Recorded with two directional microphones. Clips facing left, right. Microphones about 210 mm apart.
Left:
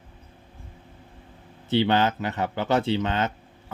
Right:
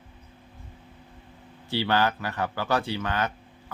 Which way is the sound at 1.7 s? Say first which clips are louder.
Left 4 dB; 20° left (ahead or behind).